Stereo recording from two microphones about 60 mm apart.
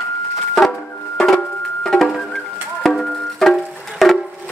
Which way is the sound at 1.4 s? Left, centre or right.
Centre.